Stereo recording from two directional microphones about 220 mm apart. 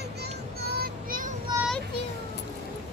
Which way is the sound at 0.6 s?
40° right (ahead or behind).